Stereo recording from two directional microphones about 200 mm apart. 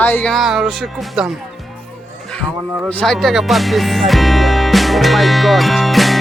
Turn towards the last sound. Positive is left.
turn(degrees=0)  # may be behind; listen again after turning